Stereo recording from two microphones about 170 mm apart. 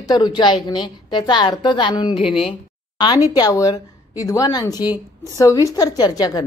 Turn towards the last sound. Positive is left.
turn(degrees=20)  # may be behind; listen again after turning